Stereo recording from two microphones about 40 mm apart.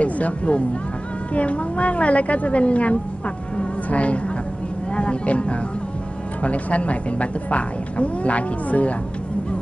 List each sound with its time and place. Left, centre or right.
0.0 s a woman's voice: left
3.5 s a sound: left
4.9 s a woman's voice: left